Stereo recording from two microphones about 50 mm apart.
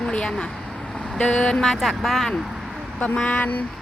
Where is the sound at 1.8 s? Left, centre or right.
Centre.